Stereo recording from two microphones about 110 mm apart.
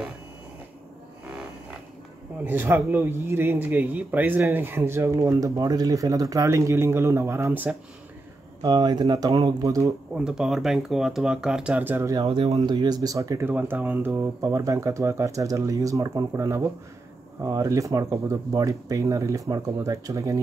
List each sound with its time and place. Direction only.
2.4 s speech: 20° right (ahead or behind)
8.6 s speech: 35° right (ahead or behind)
10.1 s speech: 5° right (ahead or behind)
12.4 s speech: 35° right (ahead or behind); by 14.2 s 15° right (ahead or behind)
14.4 s speech: 30° right (ahead or behind)